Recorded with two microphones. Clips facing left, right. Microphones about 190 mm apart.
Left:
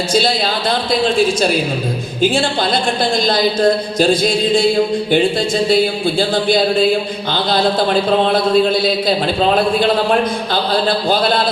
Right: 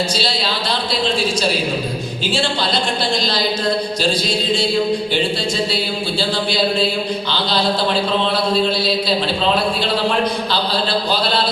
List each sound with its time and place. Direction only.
0.1 s speech: 50° left (ahead or behind)
2.2 s speech: 50° left (ahead or behind)
5.6 s speech: 50° left (ahead or behind)